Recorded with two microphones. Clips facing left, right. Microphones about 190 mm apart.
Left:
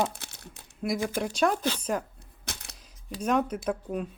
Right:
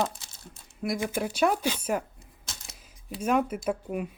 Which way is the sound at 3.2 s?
5° right (ahead or behind).